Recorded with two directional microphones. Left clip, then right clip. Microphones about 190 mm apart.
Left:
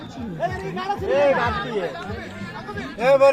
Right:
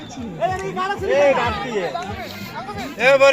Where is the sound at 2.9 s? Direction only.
20° right (ahead or behind).